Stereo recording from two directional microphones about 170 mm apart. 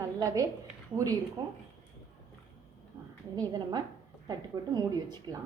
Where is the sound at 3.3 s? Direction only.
25° right (ahead or behind).